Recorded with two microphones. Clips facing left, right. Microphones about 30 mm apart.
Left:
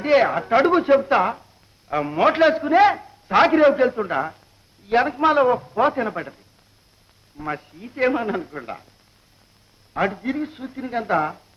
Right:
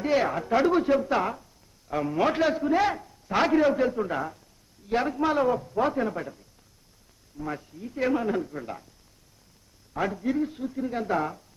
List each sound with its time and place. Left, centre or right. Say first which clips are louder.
0.0 s a man's voice: left 7 dB; left
9.9 s a man's voice: left 4 dB; left